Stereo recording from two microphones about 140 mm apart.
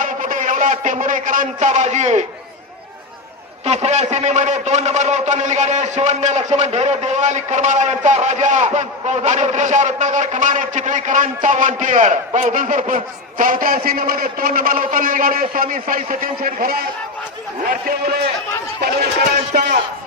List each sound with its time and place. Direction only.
0.0 s a man's voice: 70° right (ahead or behind)
3.7 s a man's voice: 50° right (ahead or behind); by 18.2 s 90° right